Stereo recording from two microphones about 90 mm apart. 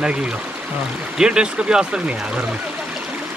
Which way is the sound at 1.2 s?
10° right (ahead or behind).